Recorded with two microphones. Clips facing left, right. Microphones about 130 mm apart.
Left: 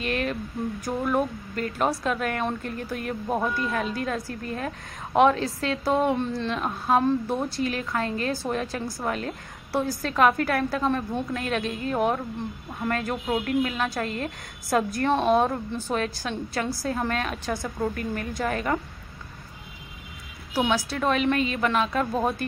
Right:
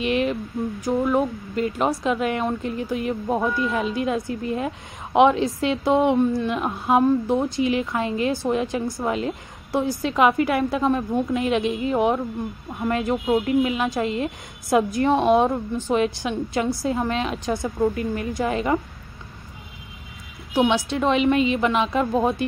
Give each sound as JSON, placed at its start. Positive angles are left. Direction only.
{"t": 0.0, "sound": "a sound", "side_deg": -10}
{"t": 1.1, "sound": "a woman's voice", "side_deg": -15}
{"t": 3.7, "sound": "a woman's voice", "side_deg": -20}
{"t": 17.8, "sound": "speech", "side_deg": -5}
{"t": 18.4, "sound": "a woman's voice", "side_deg": -15}
{"t": 20.5, "sound": "a woman's voice", "side_deg": -20}